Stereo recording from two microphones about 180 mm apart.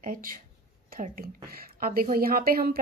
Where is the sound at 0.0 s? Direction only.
50° right (ahead or behind).